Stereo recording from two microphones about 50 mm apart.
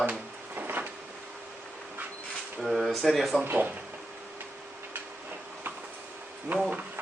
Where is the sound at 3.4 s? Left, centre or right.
Right.